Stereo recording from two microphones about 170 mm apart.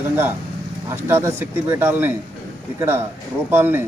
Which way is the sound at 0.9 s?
15° right (ahead or behind).